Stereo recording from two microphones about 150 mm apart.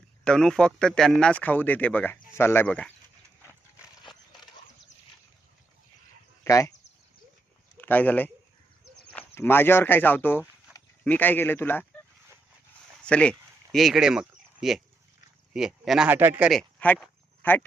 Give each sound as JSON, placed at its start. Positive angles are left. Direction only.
{"t": 0.3, "sound": "speech", "side_deg": 5}
{"t": 6.4, "sound": "a sound", "side_deg": 20}
{"t": 7.8, "sound": "a man's voice", "side_deg": 10}
{"t": 13.1, "sound": "speech", "side_deg": 5}
{"t": 16.5, "sound": "speech", "side_deg": 5}